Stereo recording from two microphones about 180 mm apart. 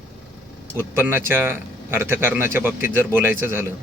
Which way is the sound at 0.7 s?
10° right (ahead or behind).